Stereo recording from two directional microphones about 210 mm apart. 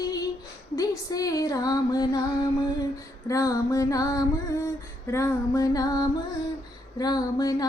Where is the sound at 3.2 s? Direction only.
15° left (ahead or behind).